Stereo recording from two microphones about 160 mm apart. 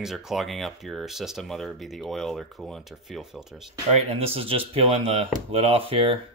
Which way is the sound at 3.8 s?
40° right (ahead or behind).